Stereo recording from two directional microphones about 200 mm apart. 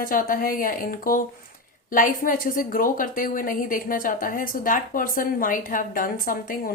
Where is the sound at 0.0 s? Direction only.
45° left (ahead or behind).